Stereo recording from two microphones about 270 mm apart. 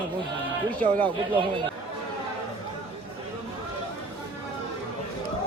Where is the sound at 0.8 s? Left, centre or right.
Centre.